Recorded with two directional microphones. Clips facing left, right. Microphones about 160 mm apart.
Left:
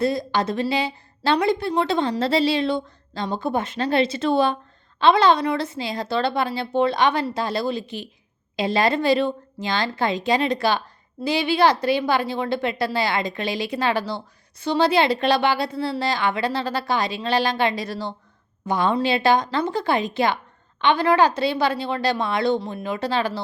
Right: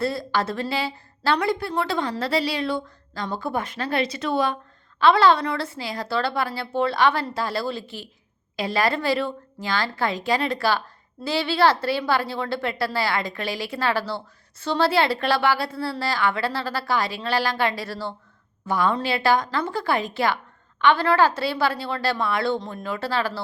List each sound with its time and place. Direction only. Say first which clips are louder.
0.0 s a woman's voice: left 3 dB; 20° left (ahead or behind)